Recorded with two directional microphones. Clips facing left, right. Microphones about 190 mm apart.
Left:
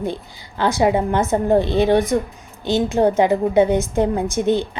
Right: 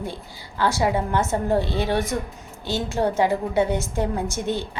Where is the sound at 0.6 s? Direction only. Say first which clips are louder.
Left 5 dB; 20° left (ahead or behind).